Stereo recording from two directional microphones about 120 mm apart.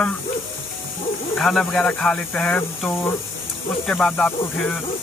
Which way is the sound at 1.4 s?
5° left (ahead or behind).